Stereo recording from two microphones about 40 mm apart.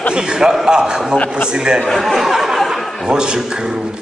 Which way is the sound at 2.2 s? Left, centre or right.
Centre.